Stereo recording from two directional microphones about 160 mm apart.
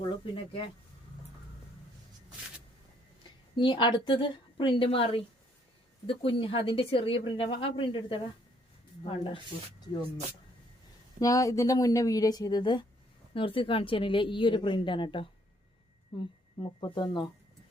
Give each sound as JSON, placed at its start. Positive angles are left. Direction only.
{"t": 0.0, "sound": "a woman's voice", "side_deg": 30}
{"t": 3.5, "sound": "a woman's voice", "side_deg": 30}
{"t": 11.2, "sound": "a woman's voice", "side_deg": 20}